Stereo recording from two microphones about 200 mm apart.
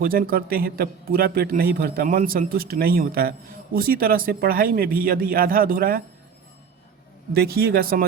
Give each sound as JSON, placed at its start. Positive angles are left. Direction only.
{"t": 0.0, "sound": "a man's voice", "side_deg": -45}
{"t": 7.3, "sound": "a man's voice", "side_deg": -50}